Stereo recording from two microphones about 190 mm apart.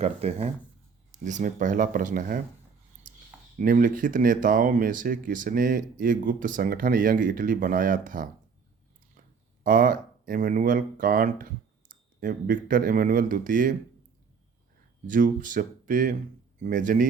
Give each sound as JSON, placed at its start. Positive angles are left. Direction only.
{"t": 0.0, "sound": "speech", "side_deg": -35}
{"t": 3.1, "sound": "a sound", "side_deg": -45}
{"t": 3.6, "sound": "speech", "side_deg": -45}
{"t": 9.6, "sound": "speech", "side_deg": -45}
{"t": 15.0, "sound": "speech", "side_deg": -45}